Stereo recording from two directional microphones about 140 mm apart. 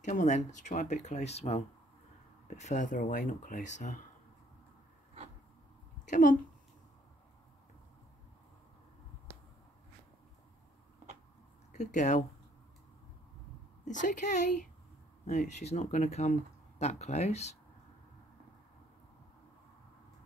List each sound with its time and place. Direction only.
0.0 s speech: 60° left (ahead or behind)
6.0 s a woman's voice: 65° left (ahead or behind)
11.7 s speech: 60° left (ahead or behind)
13.8 s speech: 60° left (ahead or behind)